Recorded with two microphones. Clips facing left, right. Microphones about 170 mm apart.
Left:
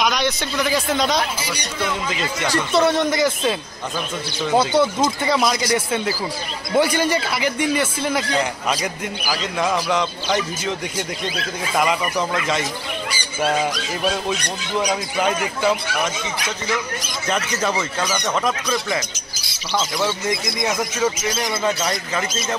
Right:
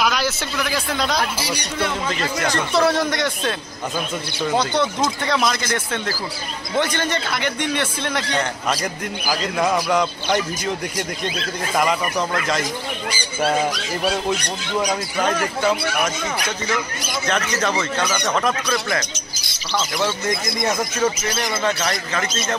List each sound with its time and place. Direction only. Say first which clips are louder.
0.0 s a man's voice: left 1 dB; 5° right (ahead or behind)
2.4 s a man's voice: left 1 dB; 5° left (ahead or behind)
6.8 s a man's voice: left 4 dB; 10° left (ahead or behind)
11.7 s a man's voice: even; centre (ahead or behind)
17.3 s a man's voice: even; 5° left (ahead or behind)
20.0 s a man's voice: even; 5° left (ahead or behind)